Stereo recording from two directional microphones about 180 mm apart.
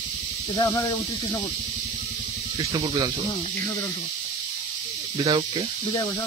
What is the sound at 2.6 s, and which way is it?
Speech, 25° right (ahead or behind).